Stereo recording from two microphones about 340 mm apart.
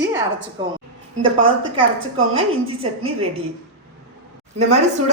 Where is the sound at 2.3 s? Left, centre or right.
Centre.